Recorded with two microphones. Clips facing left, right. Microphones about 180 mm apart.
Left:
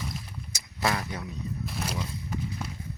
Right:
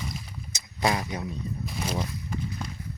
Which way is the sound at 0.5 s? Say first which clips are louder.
Right 3 dB; 20° right (ahead or behind).